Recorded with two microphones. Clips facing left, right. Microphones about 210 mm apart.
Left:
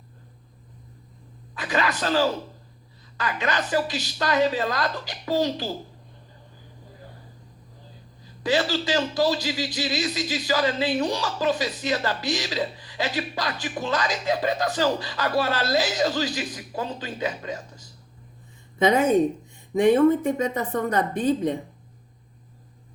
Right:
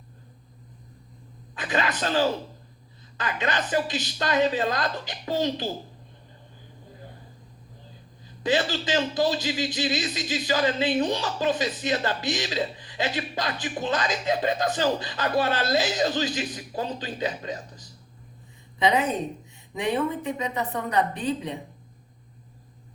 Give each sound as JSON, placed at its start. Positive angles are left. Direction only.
{"t": 1.5, "sound": "a man's voice", "side_deg": -20}
{"t": 8.2, "sound": "a man's voice", "side_deg": -20}
{"t": 18.8, "sound": "a woman's voice", "side_deg": 45}